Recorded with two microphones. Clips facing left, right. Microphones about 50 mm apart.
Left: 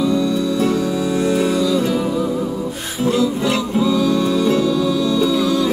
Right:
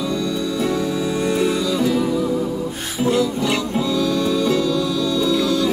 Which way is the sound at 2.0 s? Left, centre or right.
Left.